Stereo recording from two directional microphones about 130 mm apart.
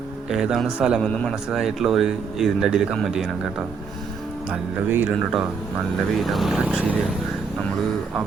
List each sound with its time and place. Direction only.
0.3 s speech: 5° right (ahead or behind)
1.0 s a man's voice: 5° left (ahead or behind)
1.5 s speech: 5° right (ahead or behind)
4.9 s speech: 15° right (ahead or behind)
6.1 s speech: centre (ahead or behind)